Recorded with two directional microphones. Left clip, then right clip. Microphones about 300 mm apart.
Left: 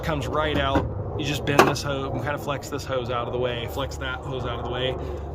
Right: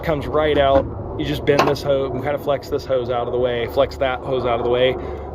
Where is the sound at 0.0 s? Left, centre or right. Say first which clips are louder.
Right 6 dB; centre.